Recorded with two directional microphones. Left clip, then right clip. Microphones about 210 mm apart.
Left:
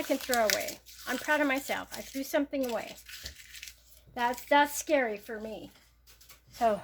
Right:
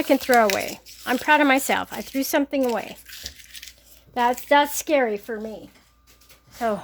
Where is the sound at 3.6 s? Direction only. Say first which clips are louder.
Right 5 dB; 10° right (ahead or behind).